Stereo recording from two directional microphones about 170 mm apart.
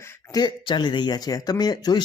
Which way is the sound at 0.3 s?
25° left (ahead or behind).